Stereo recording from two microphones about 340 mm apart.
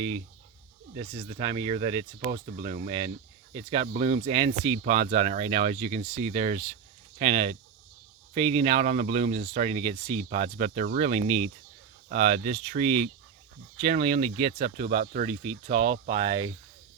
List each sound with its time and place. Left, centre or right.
0.9 s speech: centre